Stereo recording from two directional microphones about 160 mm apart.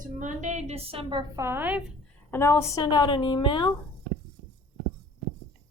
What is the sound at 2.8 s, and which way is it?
Speech, 25° left (ahead or behind).